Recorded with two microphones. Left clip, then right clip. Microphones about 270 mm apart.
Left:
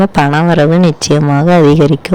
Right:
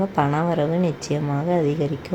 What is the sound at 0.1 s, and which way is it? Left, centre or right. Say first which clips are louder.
Speech: left 11 dB; left.